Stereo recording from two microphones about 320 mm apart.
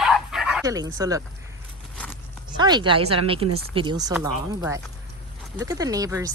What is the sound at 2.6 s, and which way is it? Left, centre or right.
Speech, centre.